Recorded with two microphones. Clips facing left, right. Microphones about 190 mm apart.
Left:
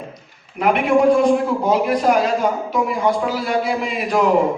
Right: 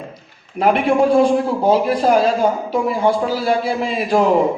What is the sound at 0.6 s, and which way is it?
A man's voice, 30° right (ahead or behind).